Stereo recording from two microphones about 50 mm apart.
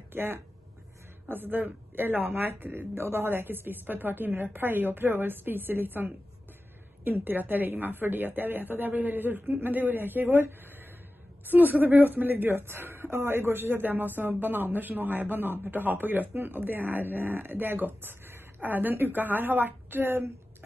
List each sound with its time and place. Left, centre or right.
0.1 s a woman's voice: right
2.9 s a woman's voice: right